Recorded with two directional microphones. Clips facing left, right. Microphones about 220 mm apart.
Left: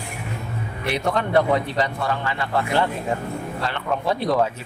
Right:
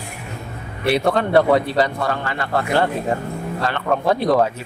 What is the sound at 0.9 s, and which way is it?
Speech, 35° right (ahead or behind).